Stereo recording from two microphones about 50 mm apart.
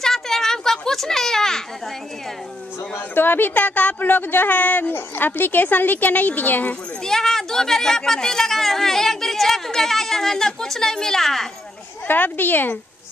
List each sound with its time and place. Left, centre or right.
0.0 s children playing: centre
2.9 s a woman's voice: left
7.0 s speech: centre
12.1 s a woman's voice: left